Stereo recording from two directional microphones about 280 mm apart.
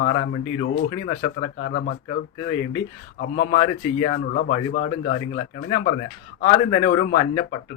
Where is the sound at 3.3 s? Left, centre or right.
Left.